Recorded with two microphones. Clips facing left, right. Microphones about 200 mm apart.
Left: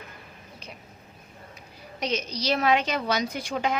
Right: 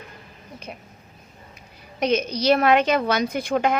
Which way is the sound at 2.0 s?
55° right (ahead or behind).